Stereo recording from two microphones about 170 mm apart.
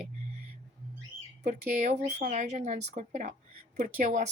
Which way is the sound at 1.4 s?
45° right (ahead or behind).